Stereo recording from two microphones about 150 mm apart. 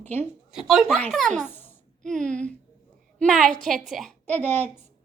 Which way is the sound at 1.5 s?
15° left (ahead or behind).